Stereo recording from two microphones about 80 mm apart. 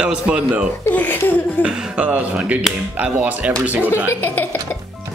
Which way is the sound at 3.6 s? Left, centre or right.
Centre.